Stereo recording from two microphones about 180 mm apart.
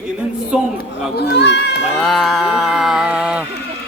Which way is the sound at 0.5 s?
5° right (ahead or behind).